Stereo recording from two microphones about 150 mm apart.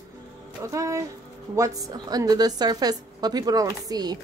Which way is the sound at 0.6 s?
20° right (ahead or behind).